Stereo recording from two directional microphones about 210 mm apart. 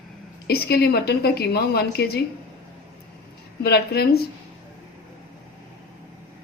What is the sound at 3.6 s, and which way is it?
Speech, 50° left (ahead or behind).